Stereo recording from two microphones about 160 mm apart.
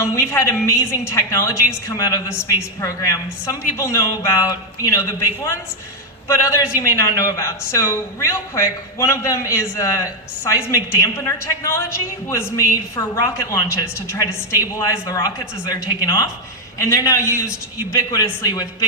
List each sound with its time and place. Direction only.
0.0 s a man's voice: 20° left (ahead or behind)